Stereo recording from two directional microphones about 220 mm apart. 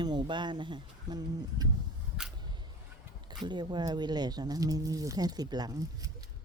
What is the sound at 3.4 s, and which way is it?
Speech, 20° right (ahead or behind).